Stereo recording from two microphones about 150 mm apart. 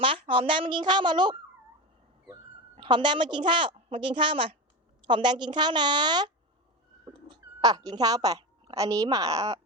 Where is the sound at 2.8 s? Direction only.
30° right (ahead or behind).